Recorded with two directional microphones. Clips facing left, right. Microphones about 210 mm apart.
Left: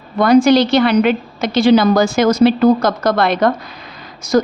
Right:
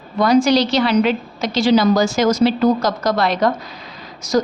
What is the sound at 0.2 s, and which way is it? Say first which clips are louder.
A woman's voice: left 4 dB; 55° left (ahead or behind).